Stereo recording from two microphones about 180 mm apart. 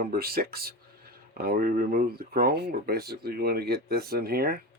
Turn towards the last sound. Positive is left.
turn(degrees=-60)  # may be behind; listen again after turning